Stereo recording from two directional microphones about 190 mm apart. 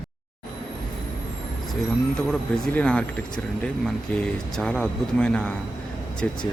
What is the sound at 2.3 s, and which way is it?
Speech, 5° left (ahead or behind).